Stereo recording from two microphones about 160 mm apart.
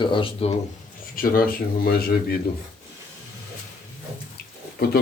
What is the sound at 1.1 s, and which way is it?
Speech, 65° left (ahead or behind).